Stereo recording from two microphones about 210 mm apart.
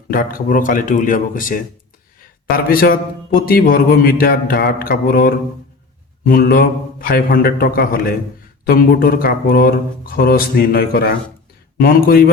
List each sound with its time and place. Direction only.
0.1 s speech: 45° left (ahead or behind)
2.6 s speech: 45° left (ahead or behind)